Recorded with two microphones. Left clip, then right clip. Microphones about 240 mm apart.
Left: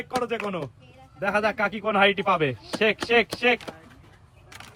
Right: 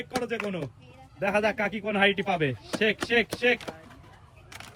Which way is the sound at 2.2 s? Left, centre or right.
Left.